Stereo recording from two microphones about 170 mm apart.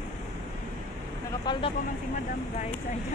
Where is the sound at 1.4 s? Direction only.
30° left (ahead or behind).